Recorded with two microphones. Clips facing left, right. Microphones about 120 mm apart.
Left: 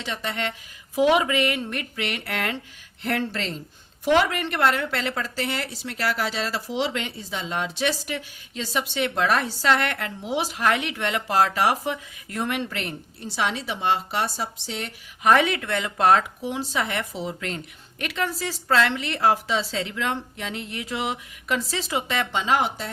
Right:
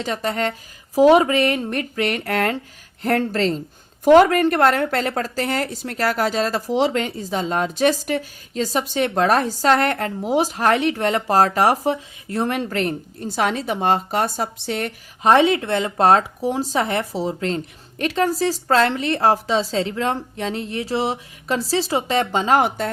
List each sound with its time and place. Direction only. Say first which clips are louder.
0.0 s a woman's voice: right 7 dB; 40° right (ahead or behind)
15.2 s a woman's voice: right 5 dB; 30° right (ahead or behind); by 22.9 s 50° right (ahead or behind)